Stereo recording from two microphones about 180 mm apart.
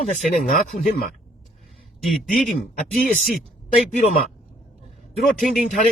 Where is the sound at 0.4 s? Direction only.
50° left (ahead or behind).